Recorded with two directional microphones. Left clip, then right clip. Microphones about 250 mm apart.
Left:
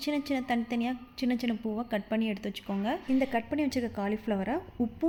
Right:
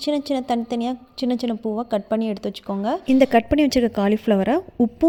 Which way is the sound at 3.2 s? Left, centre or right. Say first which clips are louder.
Right 13 dB; right.